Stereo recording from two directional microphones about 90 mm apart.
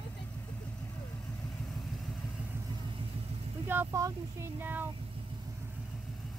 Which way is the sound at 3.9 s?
35° right (ahead or behind).